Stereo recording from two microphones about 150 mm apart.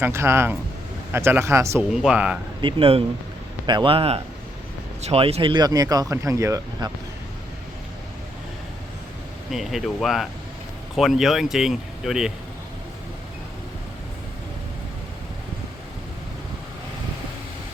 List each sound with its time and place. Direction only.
0.0 s speech: 15° right (ahead or behind)
1.9 s speech: 5° right (ahead or behind)
2.6 s speech: 35° right (ahead or behind)
9.5 s speech: centre (ahead or behind)